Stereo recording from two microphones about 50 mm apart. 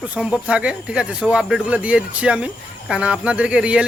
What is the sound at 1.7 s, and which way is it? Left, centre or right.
Speech, right.